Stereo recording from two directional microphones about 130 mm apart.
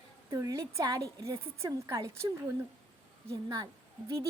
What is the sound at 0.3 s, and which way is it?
A woman's voice, 25° right (ahead or behind).